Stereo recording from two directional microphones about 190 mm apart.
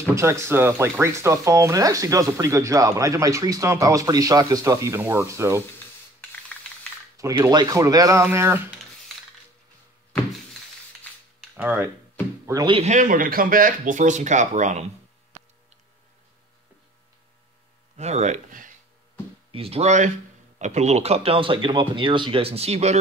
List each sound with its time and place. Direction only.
0.1 s speech: 15° right (ahead or behind)
7.2 s speech: 15° right (ahead or behind)
11.5 s speech: 10° right (ahead or behind)
12.7 s speech: 40° right (ahead or behind)
17.9 s speech: 35° right (ahead or behind)
19.5 s speech: 30° right (ahead or behind)